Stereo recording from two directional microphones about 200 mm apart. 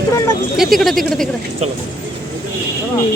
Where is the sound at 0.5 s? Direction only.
Centre (ahead or behind).